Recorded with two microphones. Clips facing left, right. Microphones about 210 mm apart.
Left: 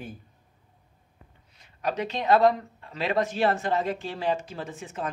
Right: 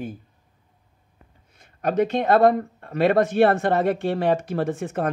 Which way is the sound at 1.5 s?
50° right (ahead or behind).